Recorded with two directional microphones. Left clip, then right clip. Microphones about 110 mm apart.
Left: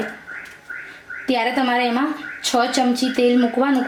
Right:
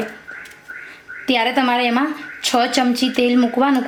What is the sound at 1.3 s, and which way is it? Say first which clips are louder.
A woman's voice: right 2 dB; 35° right (ahead or behind).